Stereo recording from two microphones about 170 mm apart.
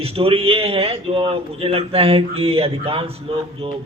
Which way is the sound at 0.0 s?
35° right (ahead or behind).